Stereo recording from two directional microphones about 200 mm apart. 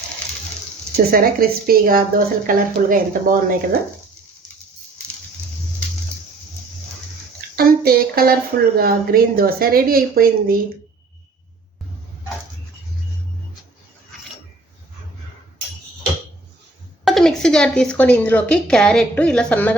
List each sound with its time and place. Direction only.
0.9 s a woman's voice: 45° right (ahead or behind)
7.5 s a sound: 50° right (ahead or behind)
8.8 s a woman's voice: 50° right (ahead or behind)
17.1 s a woman's voice: centre (ahead or behind)